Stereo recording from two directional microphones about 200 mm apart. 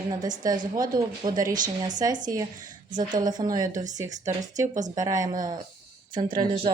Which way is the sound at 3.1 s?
20° right (ahead or behind).